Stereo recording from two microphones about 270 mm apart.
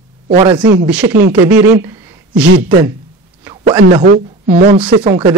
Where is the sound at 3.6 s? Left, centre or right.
Right.